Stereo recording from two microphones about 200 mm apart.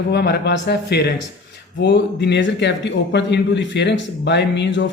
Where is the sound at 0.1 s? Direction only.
55° left (ahead or behind).